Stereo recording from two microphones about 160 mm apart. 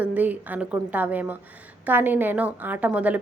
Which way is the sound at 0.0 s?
10° right (ahead or behind).